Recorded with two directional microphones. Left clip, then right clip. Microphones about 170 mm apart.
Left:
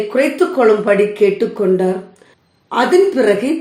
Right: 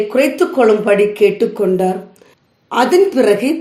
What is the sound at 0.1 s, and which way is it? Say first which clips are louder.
A woman's voice: left 2 dB; 30° right (ahead or behind).